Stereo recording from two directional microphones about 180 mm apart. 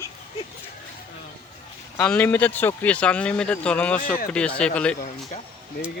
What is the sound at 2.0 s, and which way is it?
Speech, 5° left (ahead or behind).